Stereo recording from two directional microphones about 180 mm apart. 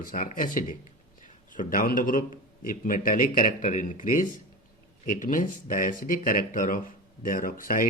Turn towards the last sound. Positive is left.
turn(degrees=50)  # may be behind; listen again after turning